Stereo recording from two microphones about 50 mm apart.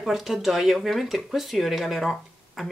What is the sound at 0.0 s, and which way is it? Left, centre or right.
Speech, centre.